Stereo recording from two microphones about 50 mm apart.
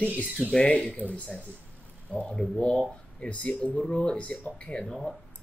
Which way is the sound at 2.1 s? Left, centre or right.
Centre.